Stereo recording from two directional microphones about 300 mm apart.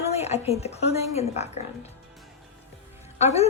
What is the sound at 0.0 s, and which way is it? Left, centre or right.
A woman's voice, left.